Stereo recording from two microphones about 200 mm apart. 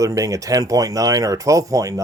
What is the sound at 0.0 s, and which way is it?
Speech, 15° right (ahead or behind).